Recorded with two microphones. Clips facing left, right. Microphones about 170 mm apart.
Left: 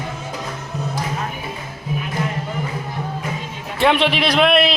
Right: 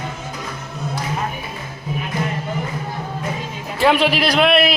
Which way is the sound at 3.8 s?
5° right (ahead or behind).